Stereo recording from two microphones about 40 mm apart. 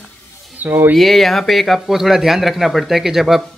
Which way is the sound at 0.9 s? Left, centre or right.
Centre.